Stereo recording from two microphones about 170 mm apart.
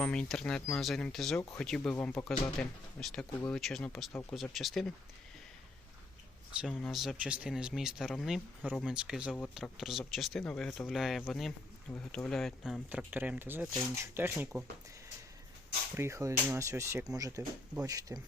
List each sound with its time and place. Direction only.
0.0 s speech: 5° left (ahead or behind)
6.5 s speech: 5° right (ahead or behind)
16.0 s speech: 15° right (ahead or behind)